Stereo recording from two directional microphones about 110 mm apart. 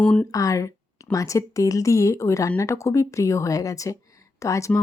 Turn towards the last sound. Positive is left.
turn(degrees=30)  # may be behind; listen again after turning